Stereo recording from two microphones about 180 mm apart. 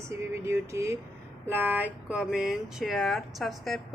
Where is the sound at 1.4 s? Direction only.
10° right (ahead or behind).